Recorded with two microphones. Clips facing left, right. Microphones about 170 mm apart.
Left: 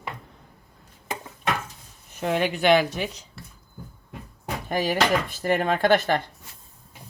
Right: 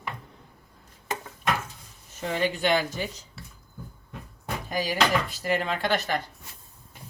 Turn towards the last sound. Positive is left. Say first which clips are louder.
# left 6 dB
turn(degrees=50)  # may be behind; listen again after turning